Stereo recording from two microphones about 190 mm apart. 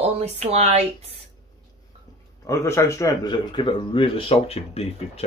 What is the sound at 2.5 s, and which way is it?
Speech, 15° left (ahead or behind).